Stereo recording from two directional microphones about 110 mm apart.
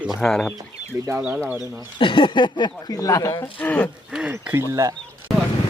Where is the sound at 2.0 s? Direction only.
50° left (ahead or behind); by 3.3 s 30° left (ahead or behind).